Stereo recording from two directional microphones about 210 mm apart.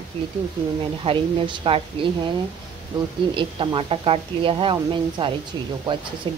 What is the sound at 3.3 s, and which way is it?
Speech, 25° right (ahead or behind).